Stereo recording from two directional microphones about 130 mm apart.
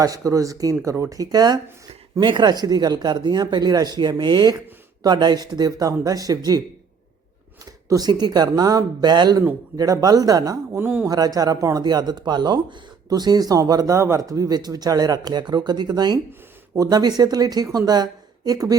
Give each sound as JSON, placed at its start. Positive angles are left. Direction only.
{"t": 0.0, "sound": "speech", "side_deg": -25}
{"t": 7.6, "sound": "speech", "side_deg": -30}
{"t": 10.8, "sound": "a man's voice", "side_deg": -15}
{"t": 11.1, "sound": "speech", "side_deg": -30}